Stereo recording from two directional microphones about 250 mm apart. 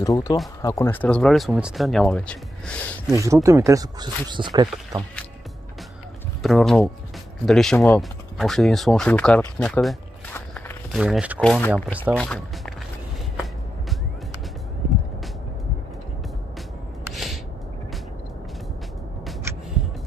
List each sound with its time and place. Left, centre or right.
0.0 s speech: centre
3.1 s speech: centre
6.4 s speech: centre
17.1 s a sound: centre